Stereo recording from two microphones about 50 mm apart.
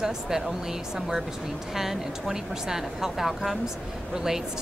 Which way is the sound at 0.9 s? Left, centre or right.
Centre.